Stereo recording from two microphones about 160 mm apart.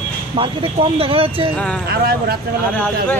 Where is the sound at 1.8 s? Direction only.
75° right (ahead or behind).